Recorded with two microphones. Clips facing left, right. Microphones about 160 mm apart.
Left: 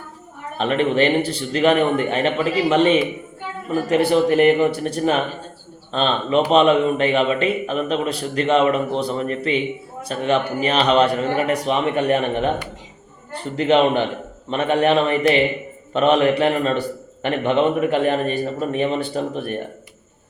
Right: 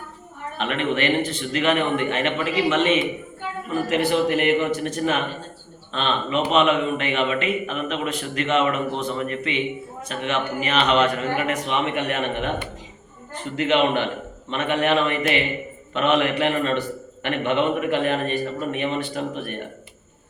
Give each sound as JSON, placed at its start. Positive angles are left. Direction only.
{"t": 0.5, "sound": "a man's voice", "side_deg": 35}